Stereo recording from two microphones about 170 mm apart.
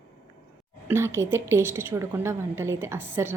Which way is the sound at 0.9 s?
15° right (ahead or behind).